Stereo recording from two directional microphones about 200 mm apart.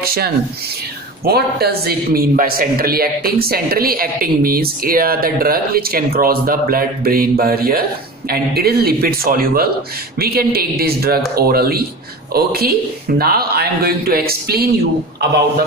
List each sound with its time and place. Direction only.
0.0 s a man's voice: 50° right (ahead or behind)